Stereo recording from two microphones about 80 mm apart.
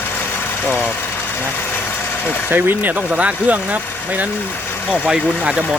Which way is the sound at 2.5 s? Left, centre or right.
Right.